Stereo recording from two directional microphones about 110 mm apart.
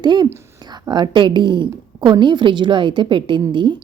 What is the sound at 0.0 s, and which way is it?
A woman's voice, 40° right (ahead or behind).